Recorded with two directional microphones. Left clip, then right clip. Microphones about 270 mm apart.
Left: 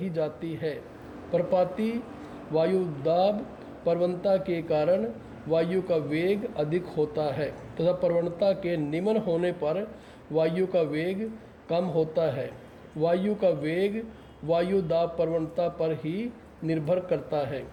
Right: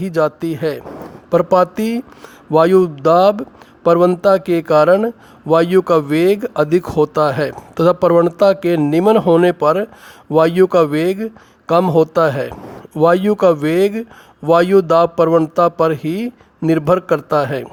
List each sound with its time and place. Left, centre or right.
0.3 s a man's voice: right